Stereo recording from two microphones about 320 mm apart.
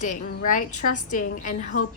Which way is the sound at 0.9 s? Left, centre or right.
Left.